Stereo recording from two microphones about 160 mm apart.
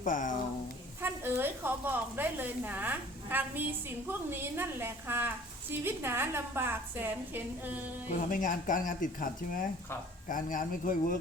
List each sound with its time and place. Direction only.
0.0 s speech: 55° left (ahead or behind)
1.0 s a woman's voice: 15° right (ahead or behind)
8.1 s speech: 55° left (ahead or behind)